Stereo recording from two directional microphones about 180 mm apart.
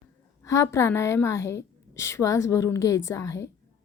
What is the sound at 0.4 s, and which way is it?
A woman's voice, 15° left (ahead or behind).